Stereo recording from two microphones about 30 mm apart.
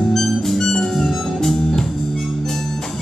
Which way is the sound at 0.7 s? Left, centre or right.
Left.